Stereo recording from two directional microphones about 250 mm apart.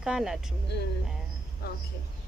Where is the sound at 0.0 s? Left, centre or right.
Centre.